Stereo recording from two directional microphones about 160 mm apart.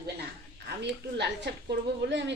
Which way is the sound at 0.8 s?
90° right.